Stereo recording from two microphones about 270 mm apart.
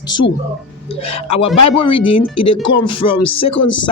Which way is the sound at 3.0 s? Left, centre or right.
Left.